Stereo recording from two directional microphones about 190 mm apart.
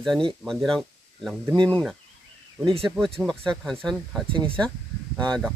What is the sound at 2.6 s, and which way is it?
Speech, 25° right (ahead or behind).